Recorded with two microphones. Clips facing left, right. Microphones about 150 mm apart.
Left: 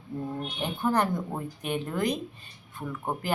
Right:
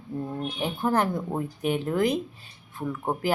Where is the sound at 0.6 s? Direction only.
5° right (ahead or behind).